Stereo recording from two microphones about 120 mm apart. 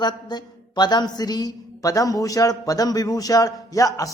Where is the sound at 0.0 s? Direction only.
35° left (ahead or behind).